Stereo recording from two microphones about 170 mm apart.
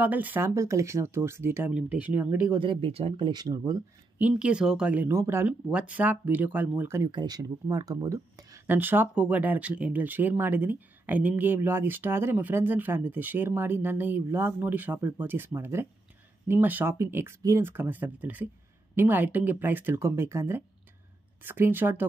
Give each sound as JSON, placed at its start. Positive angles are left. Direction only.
{"t": 0.0, "sound": "speech", "side_deg": -10}
{"t": 2.6, "sound": "speech", "side_deg": -30}
{"t": 4.3, "sound": "speech", "side_deg": -5}